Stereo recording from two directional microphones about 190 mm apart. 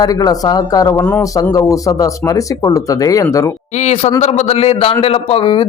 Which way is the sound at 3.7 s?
35° left (ahead or behind).